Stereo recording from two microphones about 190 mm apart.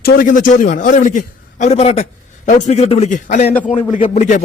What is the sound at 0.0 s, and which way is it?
A man's voice, 45° left (ahead or behind).